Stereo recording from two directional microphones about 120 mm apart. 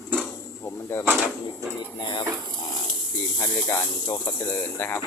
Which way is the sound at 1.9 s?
40° left (ahead or behind).